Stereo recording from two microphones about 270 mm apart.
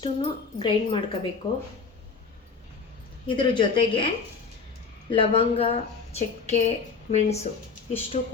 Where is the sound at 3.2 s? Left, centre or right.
Centre.